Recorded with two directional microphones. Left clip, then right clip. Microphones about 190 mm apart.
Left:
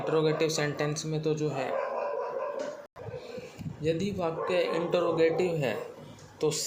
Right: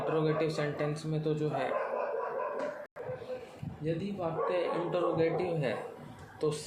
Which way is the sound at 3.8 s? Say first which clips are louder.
Left 5 dB; 45° left (ahead or behind).